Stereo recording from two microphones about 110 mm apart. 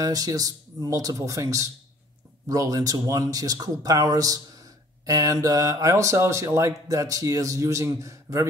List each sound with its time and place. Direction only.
0.0 s speech: 35° right (ahead or behind)